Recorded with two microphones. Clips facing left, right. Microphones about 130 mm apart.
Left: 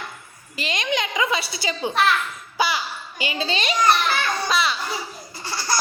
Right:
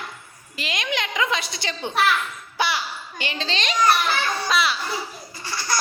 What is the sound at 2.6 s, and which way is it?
Babbling, centre (ahead or behind).